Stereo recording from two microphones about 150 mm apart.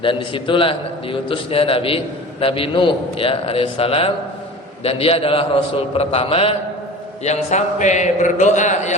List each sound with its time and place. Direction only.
0.0 s a man's voice: 35° left (ahead or behind)
7.3 s a man's voice: 50° left (ahead or behind)